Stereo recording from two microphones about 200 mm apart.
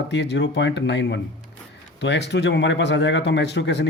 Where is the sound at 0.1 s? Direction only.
60° left (ahead or behind).